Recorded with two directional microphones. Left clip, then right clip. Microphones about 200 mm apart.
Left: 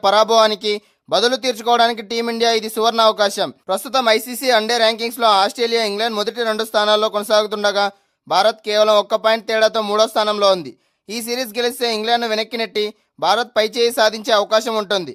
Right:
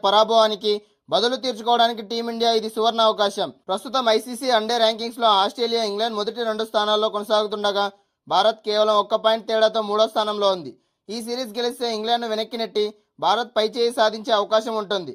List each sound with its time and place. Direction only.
0.0 s speech: 20° left (ahead or behind)